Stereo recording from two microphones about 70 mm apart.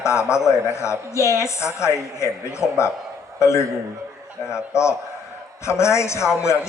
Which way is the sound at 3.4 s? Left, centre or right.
Left.